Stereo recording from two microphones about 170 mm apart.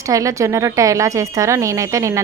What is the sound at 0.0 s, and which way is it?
A woman's voice, 20° right (ahead or behind).